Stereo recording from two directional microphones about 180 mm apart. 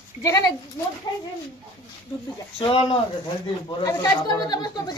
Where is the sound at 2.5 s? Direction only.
30° left (ahead or behind).